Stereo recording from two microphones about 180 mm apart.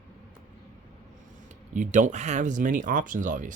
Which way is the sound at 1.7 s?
45° right (ahead or behind).